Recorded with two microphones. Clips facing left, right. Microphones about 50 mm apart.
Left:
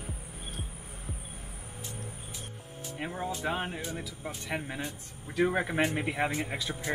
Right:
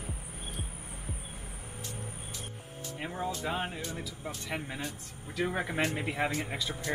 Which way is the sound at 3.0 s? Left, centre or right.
Centre.